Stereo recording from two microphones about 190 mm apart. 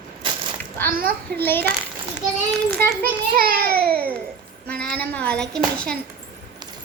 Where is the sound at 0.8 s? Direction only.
50° right (ahead or behind).